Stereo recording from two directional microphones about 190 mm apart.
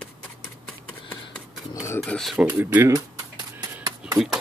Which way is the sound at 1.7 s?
15° left (ahead or behind).